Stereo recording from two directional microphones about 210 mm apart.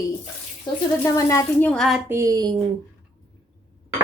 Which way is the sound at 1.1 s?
15° left (ahead or behind).